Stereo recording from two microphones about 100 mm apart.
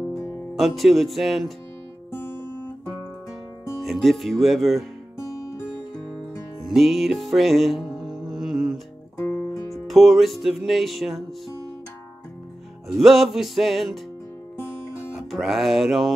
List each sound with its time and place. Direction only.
0.6 s music: centre (ahead or behind)
3.8 s music: centre (ahead or behind)
5.9 s music: 5° left (ahead or behind)
9.2 s music: 25° left (ahead or behind)
9.7 s music: centre (ahead or behind)
12.8 s music: centre (ahead or behind)
15.1 s music: 5° right (ahead or behind)